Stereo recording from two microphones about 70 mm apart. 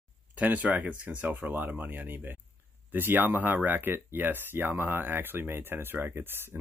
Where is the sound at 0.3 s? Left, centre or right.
Right.